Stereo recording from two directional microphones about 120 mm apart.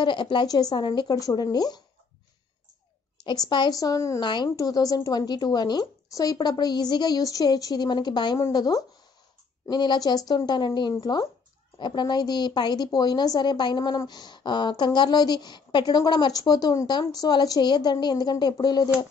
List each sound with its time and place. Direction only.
0.0 s a woman's voice: 40° left (ahead or behind)
3.3 s a woman's voice: 40° left (ahead or behind)
4.2 s a woman's voice: 40° left (ahead or behind)